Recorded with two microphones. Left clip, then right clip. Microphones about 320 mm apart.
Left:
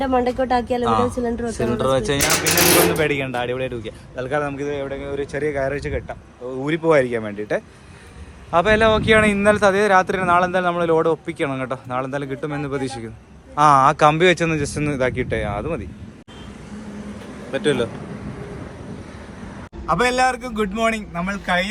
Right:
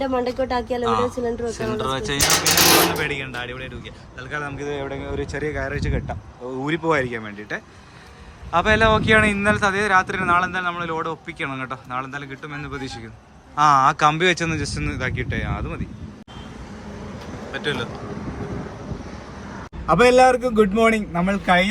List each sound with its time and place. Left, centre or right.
0.1 s speech: left
0.9 s a man's voice: centre
17.5 s a man's voice: centre
19.9 s a man's voice: centre